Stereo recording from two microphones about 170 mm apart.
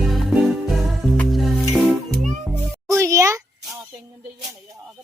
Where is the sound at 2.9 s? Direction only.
20° right (ahead or behind).